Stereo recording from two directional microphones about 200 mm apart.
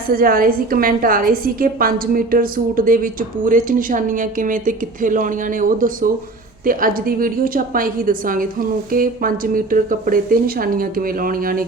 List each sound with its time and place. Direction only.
0.1 s a woman's voice: 45° right (ahead or behind)